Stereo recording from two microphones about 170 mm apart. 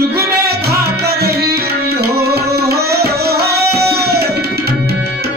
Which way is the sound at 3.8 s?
70° right (ahead or behind).